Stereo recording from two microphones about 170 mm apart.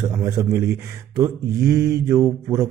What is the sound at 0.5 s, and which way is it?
Mantra, 15° right (ahead or behind).